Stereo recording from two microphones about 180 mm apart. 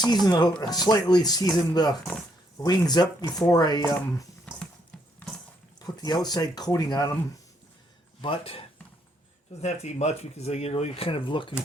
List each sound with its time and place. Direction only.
0.3 s speech: 20° left (ahead or behind)
4.6 s clip-clop: 5° left (ahead or behind)
5.8 s speech: 20° left (ahead or behind)
8.2 s speech: 30° left (ahead or behind)